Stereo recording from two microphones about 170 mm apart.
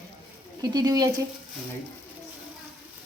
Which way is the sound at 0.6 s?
20° right (ahead or behind).